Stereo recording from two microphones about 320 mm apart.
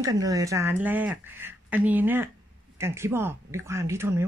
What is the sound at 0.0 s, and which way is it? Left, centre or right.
Speech, centre.